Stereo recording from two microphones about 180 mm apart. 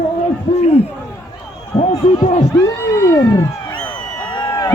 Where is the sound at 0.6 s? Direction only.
35° left (ahead or behind).